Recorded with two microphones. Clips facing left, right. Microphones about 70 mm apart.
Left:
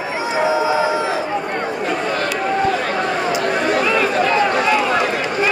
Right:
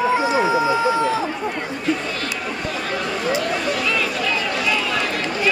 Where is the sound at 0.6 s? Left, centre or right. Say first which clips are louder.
Left 1 dB; left.